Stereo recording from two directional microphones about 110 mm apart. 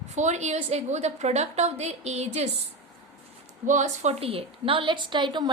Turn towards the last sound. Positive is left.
turn(degrees=-45)  # may be behind; listen again after turning